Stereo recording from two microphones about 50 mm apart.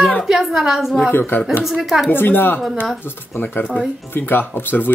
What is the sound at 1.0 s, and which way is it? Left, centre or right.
Speech, left.